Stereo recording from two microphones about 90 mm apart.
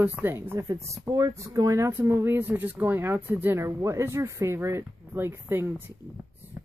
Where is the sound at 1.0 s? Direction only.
45° right (ahead or behind).